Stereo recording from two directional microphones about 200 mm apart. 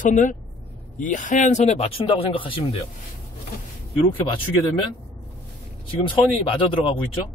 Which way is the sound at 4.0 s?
25° left (ahead or behind).